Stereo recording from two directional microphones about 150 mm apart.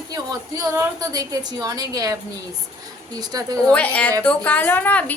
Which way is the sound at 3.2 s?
25° right (ahead or behind).